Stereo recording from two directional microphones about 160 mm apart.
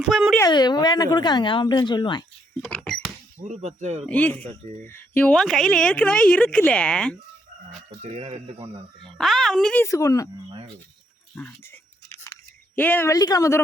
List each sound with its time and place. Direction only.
0.1 s a woman's voice: 5° right (ahead or behind)
0.4 s speech: 25° left (ahead or behind)
2.7 s rodents: 5° left (ahead or behind)
3.4 s speech: 45° right (ahead or behind)
4.0 s a woman's voice: 10° left (ahead or behind)
8.0 s speech: 40° right (ahead or behind)
9.0 s a woman's voice: centre (ahead or behind)
9.8 s speech: 20° left (ahead or behind)
11.3 s a woman's voice: 10° left (ahead or behind)